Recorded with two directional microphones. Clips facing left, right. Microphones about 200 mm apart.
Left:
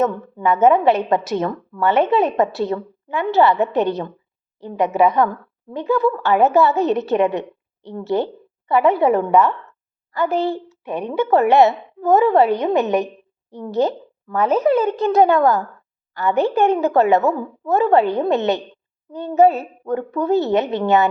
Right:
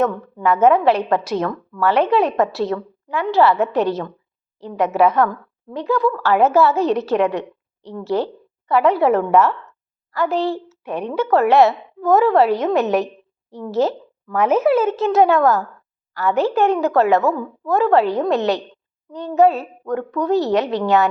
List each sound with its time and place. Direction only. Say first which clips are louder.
0.0 s speech: even; centre (ahead or behind)
7.3 s a woman's voice: even; 20° left (ahead or behind)
7.9 s a woman's voice: even; centre (ahead or behind)